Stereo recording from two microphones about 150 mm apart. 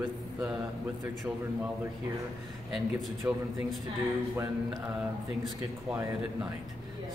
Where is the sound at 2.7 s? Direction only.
Centre (ahead or behind).